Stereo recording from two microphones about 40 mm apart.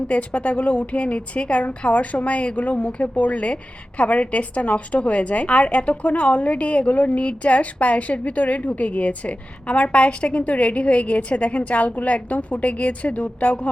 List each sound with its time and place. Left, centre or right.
0.1 s a woman's voice: left